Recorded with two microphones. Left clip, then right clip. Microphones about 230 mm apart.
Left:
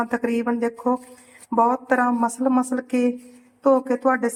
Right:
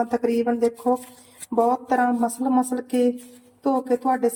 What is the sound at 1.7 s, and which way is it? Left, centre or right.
Speech, centre.